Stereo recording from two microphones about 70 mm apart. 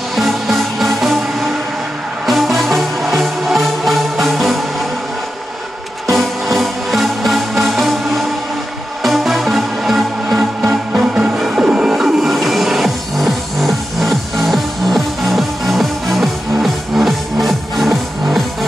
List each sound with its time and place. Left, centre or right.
0.1 s music: centre
6.0 s music: centre
10.6 s music: centre